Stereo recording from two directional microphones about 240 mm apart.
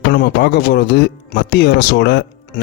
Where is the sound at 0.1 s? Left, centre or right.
Left.